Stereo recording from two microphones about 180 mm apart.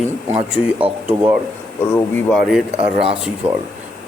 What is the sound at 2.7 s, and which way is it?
Speech, 30° right (ahead or behind).